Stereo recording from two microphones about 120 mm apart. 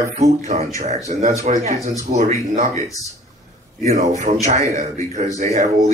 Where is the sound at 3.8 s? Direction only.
85° right.